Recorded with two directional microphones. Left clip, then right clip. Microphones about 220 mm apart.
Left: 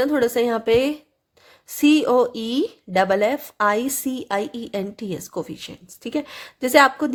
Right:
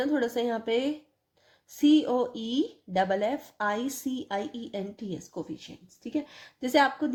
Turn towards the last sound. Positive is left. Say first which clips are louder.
# left 9 dB
turn(degrees=35)  # may be behind; listen again after turning